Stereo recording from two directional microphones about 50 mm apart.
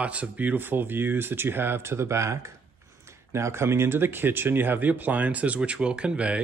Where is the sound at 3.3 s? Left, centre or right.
Right.